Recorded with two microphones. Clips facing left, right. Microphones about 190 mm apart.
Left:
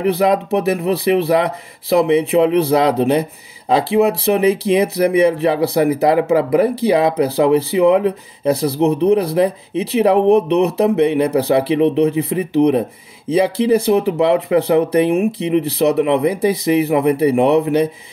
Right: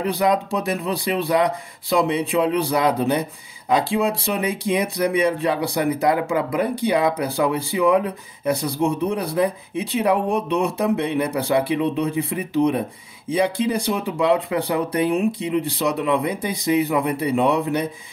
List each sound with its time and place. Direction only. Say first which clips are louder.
0.2 s speech: left 5 dB; 25° left (ahead or behind)